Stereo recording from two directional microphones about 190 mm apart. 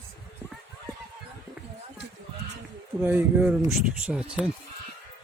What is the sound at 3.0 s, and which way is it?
Speech, 10° right (ahead or behind).